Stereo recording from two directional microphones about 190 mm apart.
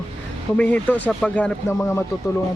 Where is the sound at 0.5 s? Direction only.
5° left (ahead or behind).